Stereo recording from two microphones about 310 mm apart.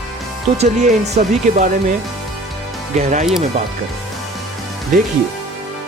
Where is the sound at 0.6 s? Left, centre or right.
Right.